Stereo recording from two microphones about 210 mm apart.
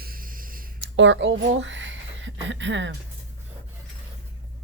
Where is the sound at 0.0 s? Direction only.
45° right (ahead or behind).